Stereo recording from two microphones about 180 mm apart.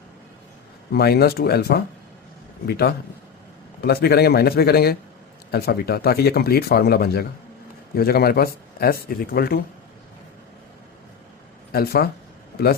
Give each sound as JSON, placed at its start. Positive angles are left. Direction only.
{"t": 0.9, "sound": "speech", "side_deg": 60}
{"t": 11.7, "sound": "speech", "side_deg": 60}